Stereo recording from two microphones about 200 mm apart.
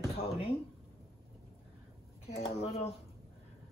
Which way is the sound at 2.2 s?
30° left (ahead or behind).